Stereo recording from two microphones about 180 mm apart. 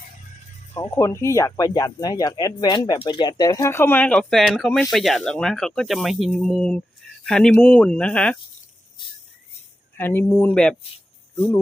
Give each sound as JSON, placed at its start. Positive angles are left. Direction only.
{"t": 0.7, "sound": "speech", "side_deg": 15}
{"t": 10.0, "sound": "speech", "side_deg": 10}